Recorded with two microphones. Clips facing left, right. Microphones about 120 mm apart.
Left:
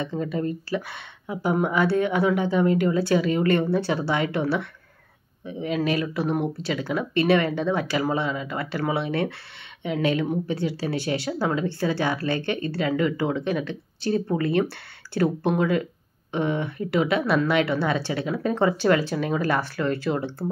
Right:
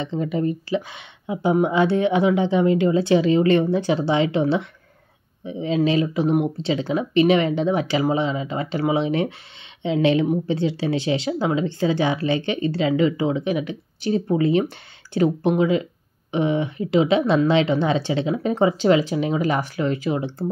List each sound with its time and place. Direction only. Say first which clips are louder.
0.2 s speech: right 4 dB; 20° right (ahead or behind)